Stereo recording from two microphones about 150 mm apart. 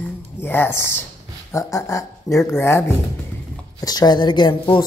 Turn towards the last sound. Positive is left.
turn(degrees=30)  # may be behind; listen again after turning